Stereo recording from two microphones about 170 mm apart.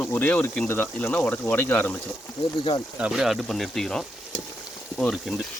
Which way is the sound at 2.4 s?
25° left (ahead or behind).